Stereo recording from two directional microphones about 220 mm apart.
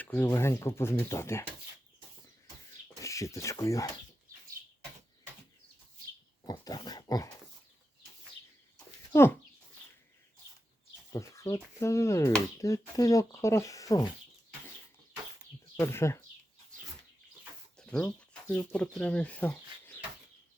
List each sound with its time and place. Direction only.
0.0 s speech: 10° left (ahead or behind)
3.0 s speech: 15° left (ahead or behind)
6.4 s dog: 20° left (ahead or behind)
11.1 s speech: 15° left (ahead or behind)
15.8 s speech: 10° left (ahead or behind)
17.7 s speech: 5° left (ahead or behind)